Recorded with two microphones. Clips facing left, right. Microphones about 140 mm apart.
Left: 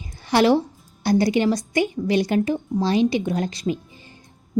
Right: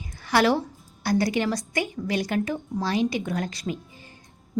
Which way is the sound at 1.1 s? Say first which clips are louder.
Left 5 dB; 25° left (ahead or behind).